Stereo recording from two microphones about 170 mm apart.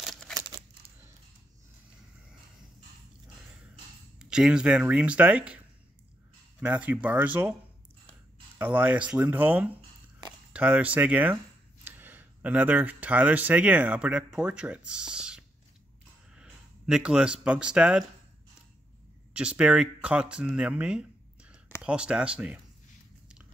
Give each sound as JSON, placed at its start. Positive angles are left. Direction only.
{"t": 0.0, "sound": "a sound", "side_deg": 0}
{"t": 4.2, "sound": "speech", "side_deg": -5}
{"t": 6.6, "sound": "speech", "side_deg": -10}
{"t": 8.5, "sound": "speech", "side_deg": -10}
{"t": 19.3, "sound": "speech", "side_deg": -5}